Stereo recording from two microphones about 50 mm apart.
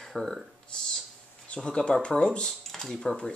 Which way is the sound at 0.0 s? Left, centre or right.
Centre.